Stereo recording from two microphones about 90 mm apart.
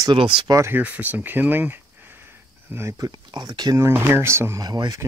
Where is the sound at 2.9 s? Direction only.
45° right (ahead or behind).